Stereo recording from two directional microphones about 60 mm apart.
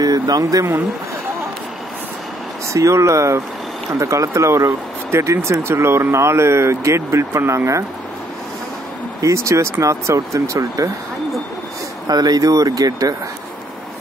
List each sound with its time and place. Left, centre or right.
0.0 s a sound: right
2.7 s speech: right
9.2 s speech: right
12.1 s speech: right